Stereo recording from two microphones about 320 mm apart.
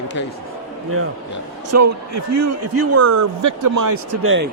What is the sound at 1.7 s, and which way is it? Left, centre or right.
A man's voice, right.